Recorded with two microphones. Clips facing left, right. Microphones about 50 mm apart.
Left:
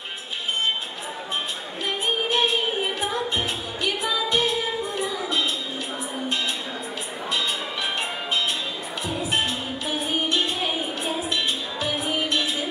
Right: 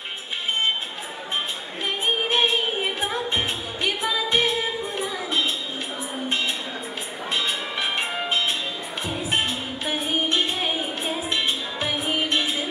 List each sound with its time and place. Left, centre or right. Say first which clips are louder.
2.2 s music: even; right
5.0 s a sound: right 1 dB; right
6.2 s music: right 2 dB; right